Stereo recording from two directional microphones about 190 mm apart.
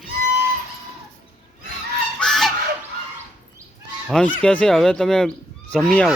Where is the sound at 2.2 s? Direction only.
Centre (ahead or behind).